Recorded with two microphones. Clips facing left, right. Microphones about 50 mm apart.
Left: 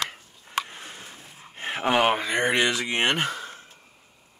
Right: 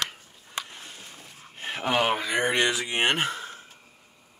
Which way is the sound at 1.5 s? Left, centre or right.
Left.